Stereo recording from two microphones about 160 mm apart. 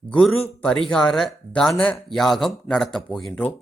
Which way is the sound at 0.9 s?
5° left (ahead or behind).